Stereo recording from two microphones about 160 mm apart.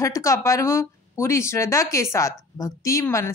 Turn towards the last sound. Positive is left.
turn(degrees=20)  # may be behind; listen again after turning